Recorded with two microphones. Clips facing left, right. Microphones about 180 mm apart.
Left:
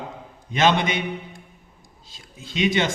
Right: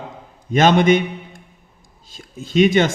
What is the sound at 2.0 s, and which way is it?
Speech, 45° right (ahead or behind).